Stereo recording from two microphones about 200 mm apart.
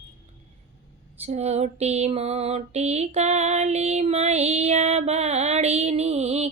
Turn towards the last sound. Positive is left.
turn(degrees=-30)  # may be behind; listen again after turning